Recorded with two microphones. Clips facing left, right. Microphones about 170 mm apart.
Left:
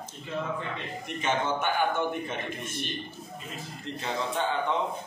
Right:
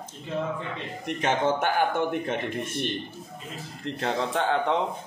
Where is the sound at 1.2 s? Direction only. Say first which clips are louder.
Right 4 dB; 90° right.